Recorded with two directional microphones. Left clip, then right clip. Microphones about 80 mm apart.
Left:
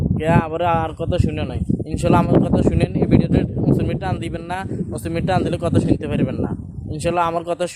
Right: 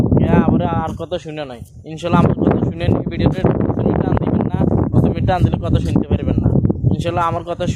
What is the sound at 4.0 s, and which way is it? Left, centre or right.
Speech, left.